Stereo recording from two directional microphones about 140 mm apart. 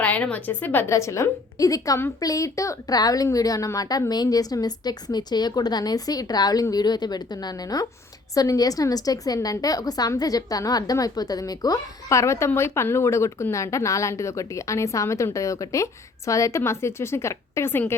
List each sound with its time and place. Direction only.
0.0 s a woman's voice: 10° left (ahead or behind)